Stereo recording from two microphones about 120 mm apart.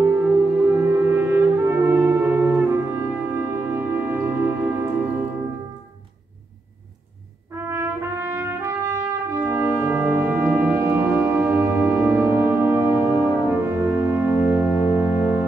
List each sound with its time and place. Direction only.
0.0 s brass instrument: 15° right (ahead or behind)
7.7 s trumpet: 20° right (ahead or behind)
13.6 s music: 15° right (ahead or behind)